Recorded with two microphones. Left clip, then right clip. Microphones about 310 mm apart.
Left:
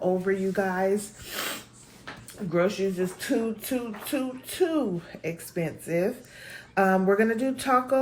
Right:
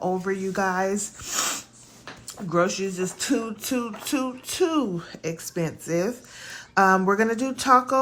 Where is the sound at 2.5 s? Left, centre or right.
Centre.